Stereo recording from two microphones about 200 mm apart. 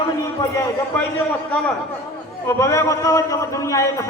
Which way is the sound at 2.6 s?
15° left (ahead or behind).